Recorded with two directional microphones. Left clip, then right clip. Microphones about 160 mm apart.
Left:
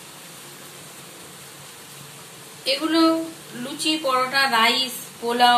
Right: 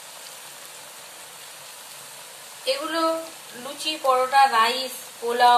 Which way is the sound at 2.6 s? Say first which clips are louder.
Left 4 dB; 40° right (ahead or behind).